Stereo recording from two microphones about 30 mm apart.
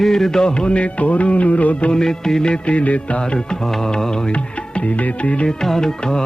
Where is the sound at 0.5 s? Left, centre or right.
Left.